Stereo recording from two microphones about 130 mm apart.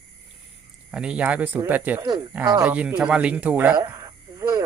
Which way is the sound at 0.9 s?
10° right (ahead or behind).